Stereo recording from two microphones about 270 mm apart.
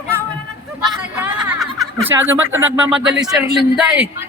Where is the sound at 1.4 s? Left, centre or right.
Centre.